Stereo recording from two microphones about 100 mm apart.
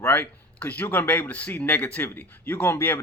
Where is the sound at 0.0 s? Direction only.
20° left (ahead or behind).